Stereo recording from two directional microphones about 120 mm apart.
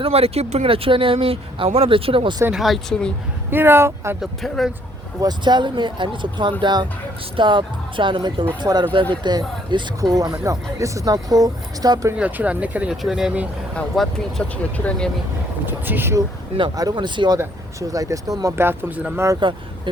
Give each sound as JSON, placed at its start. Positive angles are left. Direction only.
{"t": 0.0, "sound": "speech", "side_deg": -55}
{"t": 2.5, "sound": "speech", "side_deg": 0}
{"t": 3.5, "sound": "speech", "side_deg": -20}
{"t": 4.2, "sound": "speech", "side_deg": 0}
{"t": 5.2, "sound": "speech", "side_deg": -40}
{"t": 12.1, "sound": "speech", "side_deg": -10}
{"t": 13.7, "sound": "speech", "side_deg": 5}
{"t": 15.6, "sound": "speech", "side_deg": -15}
{"t": 16.7, "sound": "speech", "side_deg": -35}
{"t": 19.4, "sound": "speech", "side_deg": -40}